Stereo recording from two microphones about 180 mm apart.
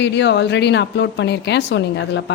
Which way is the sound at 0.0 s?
75° left (ahead or behind).